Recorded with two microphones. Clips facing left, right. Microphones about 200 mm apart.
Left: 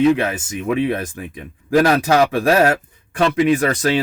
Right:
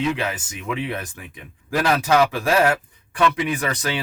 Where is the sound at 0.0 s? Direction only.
45° left (ahead or behind).